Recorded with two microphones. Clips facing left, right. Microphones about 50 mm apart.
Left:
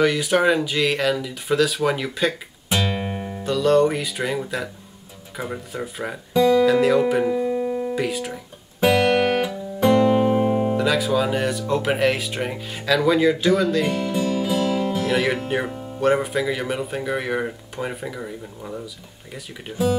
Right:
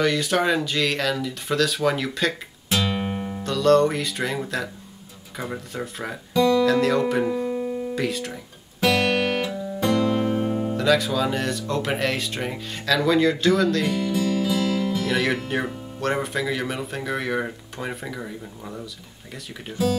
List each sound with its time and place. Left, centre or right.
0.0 s speech: centre
2.7 s music: left
3.0 s speech: centre
7.6 s music: left
7.9 s speech: centre
8.8 s music: centre; by 10.8 s left
10.8 s speech: centre